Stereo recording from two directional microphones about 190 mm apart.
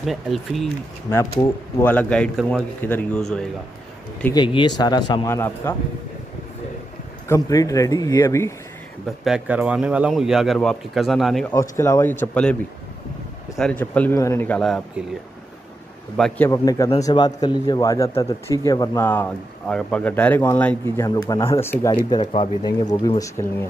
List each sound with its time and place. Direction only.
0.0 s a man's voice: centre (ahead or behind)
1.1 s a man's voice: 15° left (ahead or behind)
4.3 s speech: 25° left (ahead or behind)
7.2 s speech: 15° left (ahead or behind)
9.2 s a man's voice: 5° right (ahead or behind)
11.7 s speech: 15° left (ahead or behind)
13.6 s speech: 5° left (ahead or behind)
16.2 s a man's voice: 5° left (ahead or behind)
16.4 s speech: 15° left (ahead or behind)